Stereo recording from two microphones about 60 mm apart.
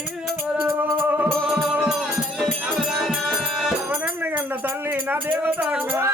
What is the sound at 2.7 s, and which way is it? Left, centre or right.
Music, centre.